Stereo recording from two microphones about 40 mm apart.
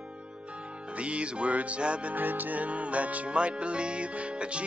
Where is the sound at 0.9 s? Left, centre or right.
Right.